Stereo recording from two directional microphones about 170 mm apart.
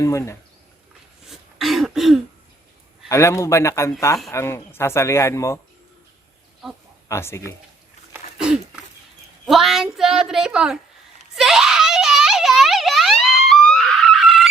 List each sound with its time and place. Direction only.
0.0 s speech: 20° left (ahead or behind)
1.3 s throat clearing: centre (ahead or behind)
3.1 s speech: 15° left (ahead or behind)
7.1 s speech: 15° left (ahead or behind)
8.1 s a sound: 5° right (ahead or behind)
9.5 s speech: centre (ahead or behind)
11.3 s a sound: 5° right (ahead or behind)
13.2 s screaming: centre (ahead or behind)